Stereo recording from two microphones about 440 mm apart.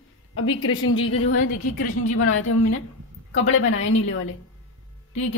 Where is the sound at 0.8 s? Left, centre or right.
Left.